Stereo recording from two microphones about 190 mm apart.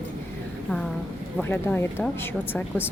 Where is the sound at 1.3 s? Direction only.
10° left (ahead or behind).